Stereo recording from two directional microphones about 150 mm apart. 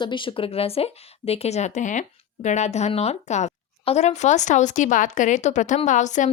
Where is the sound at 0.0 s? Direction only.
35° left (ahead or behind).